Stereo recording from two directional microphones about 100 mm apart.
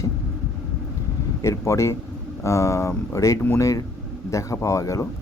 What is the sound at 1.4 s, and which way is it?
Speech, 30° left (ahead or behind).